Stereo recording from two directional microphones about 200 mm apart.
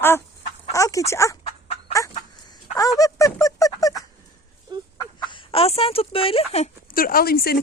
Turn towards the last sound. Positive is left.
turn(degrees=50)  # may be behind; listen again after turning